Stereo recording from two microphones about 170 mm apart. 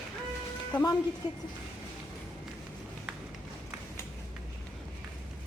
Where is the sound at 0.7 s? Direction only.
25° left (ahead or behind).